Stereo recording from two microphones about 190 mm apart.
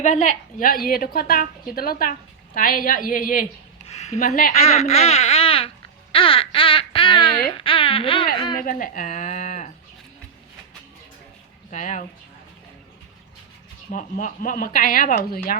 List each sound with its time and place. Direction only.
0.0 s speech: 40° left (ahead or behind)
3.8 s speech: 35° left (ahead or behind)
4.2 s speech: 45° left (ahead or behind)
4.6 s speech: 35° left (ahead or behind)
8.5 s speech: 45° left (ahead or behind)
11.7 s speech: 40° left (ahead or behind)
13.9 s speech: 45° left (ahead or behind)